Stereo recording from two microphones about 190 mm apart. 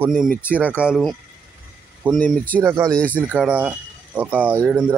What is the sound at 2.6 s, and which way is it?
Speech, 10° right (ahead or behind).